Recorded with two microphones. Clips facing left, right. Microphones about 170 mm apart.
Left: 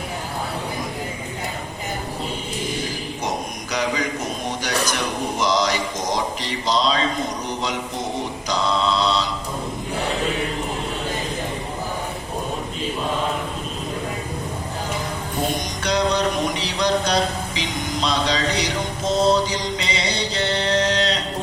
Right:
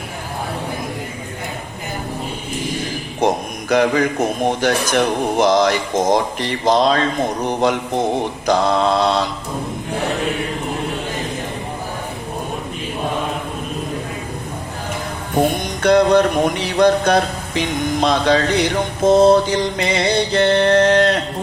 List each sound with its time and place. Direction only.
3.2 s a man's voice: 55° right (ahead or behind)
15.4 s a man's voice: 55° right (ahead or behind)